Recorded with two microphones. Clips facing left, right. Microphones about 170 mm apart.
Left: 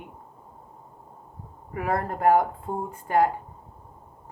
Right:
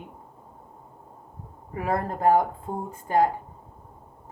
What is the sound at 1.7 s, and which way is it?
Speech, 30° right (ahead or behind).